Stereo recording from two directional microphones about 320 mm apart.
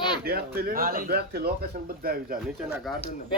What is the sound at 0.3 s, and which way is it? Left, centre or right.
A man's voice, right.